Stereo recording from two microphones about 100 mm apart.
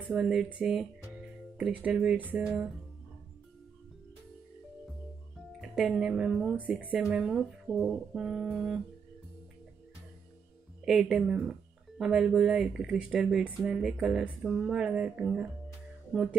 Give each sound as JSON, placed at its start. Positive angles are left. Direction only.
{"t": 0.0, "sound": "speech", "side_deg": -15}
{"t": 5.5, "sound": "speech", "side_deg": 0}
{"t": 10.9, "sound": "speech", "side_deg": -5}
{"t": 16.1, "sound": "music", "side_deg": -10}